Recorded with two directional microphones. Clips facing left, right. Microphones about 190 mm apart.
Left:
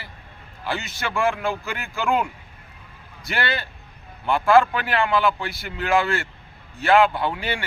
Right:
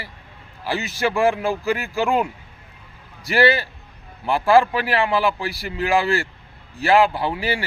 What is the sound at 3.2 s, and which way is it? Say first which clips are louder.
A man's voice: right 9 dB; 35° right (ahead or behind).